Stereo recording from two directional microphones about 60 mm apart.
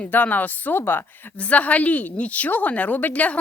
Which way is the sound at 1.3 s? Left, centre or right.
Left.